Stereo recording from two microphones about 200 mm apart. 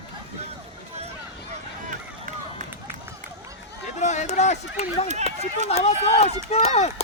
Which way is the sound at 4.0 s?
35° left (ahead or behind).